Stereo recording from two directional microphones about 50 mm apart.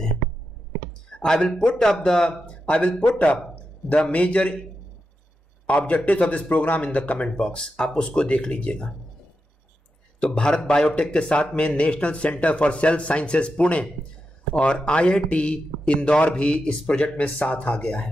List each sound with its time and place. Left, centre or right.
1.1 s a man's voice: centre
5.7 s speech: left
7.2 s speech: centre
10.2 s speech: left